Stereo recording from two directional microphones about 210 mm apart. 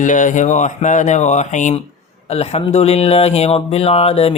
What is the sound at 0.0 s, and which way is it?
Speech, 35° left (ahead or behind).